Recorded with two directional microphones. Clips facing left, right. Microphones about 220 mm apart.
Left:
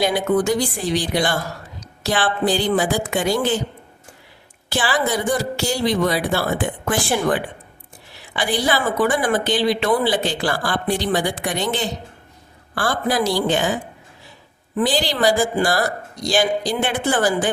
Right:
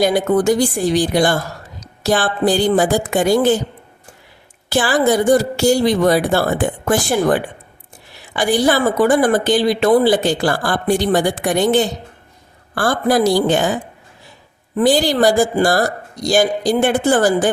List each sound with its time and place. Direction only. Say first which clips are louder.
0.0 s a woman's voice: right 4 dB; 40° right (ahead or behind)
4.7 s a woman's voice: right 6 dB; 45° right (ahead or behind)
14.8 s a woman's voice: right 6 dB; 45° right (ahead or behind)